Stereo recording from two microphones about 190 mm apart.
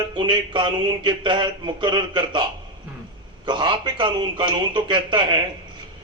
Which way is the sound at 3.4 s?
25° right (ahead or behind).